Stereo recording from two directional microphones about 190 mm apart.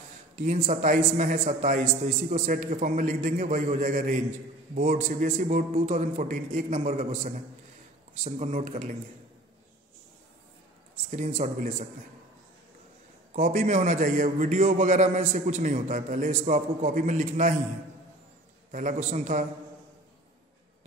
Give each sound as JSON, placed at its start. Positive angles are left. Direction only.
{"t": 0.4, "sound": "a man's voice", "side_deg": -40}
{"t": 11.1, "sound": "a man's voice", "side_deg": -40}
{"t": 13.3, "sound": "a man's voice", "side_deg": -40}
{"t": 18.7, "sound": "a man's voice", "side_deg": -40}